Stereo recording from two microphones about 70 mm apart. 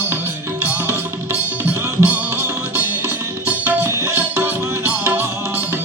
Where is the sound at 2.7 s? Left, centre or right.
Right.